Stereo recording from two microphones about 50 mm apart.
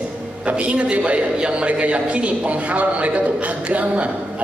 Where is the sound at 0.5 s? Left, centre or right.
Right.